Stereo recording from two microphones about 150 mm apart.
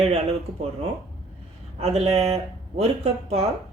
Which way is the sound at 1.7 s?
45° right (ahead or behind).